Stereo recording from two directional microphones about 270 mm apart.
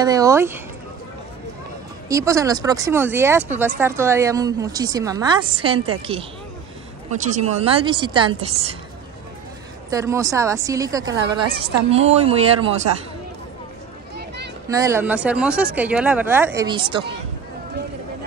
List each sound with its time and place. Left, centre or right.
0.0 s speech: centre
2.0 s speech: centre
7.2 s a woman's voice: right
9.8 s a woman's voice: centre
14.7 s speech: centre